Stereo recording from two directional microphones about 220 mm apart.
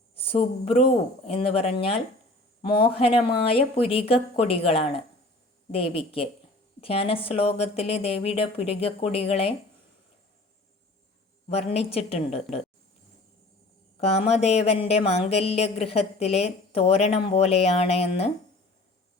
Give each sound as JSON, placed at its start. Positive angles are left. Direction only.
{"t": 0.2, "sound": "a woman's voice", "side_deg": 25}
{"t": 11.4, "sound": "a woman's voice", "side_deg": 30}
{"t": 14.0, "sound": "a woman's voice", "side_deg": 30}